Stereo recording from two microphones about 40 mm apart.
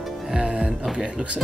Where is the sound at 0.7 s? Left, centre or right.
Centre.